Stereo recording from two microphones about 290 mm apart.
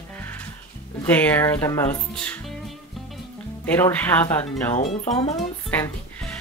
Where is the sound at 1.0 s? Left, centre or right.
Centre.